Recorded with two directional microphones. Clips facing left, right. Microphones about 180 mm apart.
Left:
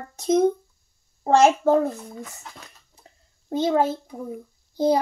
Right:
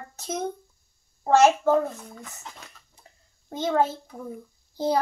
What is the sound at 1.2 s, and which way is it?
Speech, 30° left (ahead or behind).